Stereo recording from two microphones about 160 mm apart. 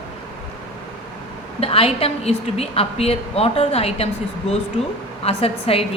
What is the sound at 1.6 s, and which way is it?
A woman's voice, 35° left (ahead or behind).